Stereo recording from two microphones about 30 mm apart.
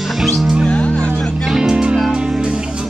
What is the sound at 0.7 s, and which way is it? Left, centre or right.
Music, left.